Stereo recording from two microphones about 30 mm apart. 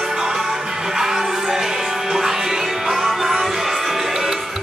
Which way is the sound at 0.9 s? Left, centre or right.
Centre.